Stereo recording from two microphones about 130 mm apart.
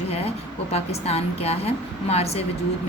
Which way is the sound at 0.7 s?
50° left (ahead or behind).